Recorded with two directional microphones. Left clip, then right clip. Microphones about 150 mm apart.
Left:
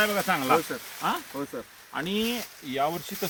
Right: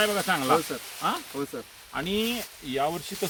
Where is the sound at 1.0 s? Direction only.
15° right (ahead or behind).